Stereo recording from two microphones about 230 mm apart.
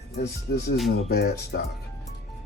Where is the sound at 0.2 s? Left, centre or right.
Left.